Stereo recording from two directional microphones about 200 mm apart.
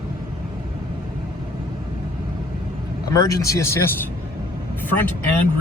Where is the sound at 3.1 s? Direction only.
15° left (ahead or behind).